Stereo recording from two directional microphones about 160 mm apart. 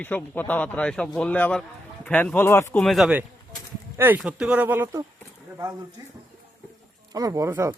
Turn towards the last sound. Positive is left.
turn(degrees=-20)  # may be behind; listen again after turning